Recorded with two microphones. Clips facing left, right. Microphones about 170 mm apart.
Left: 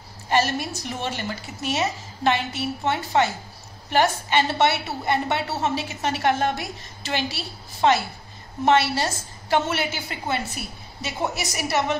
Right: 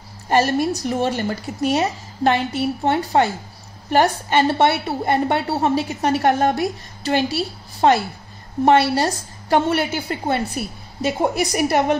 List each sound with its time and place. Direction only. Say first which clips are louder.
0.3 s a woman's voice: right 5 dB; 40° right (ahead or behind)
11.0 s a woman's voice: right 8 dB; 50° right (ahead or behind)